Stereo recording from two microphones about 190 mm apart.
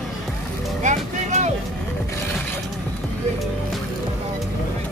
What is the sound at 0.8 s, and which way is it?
Vehicle, 40° right (ahead or behind).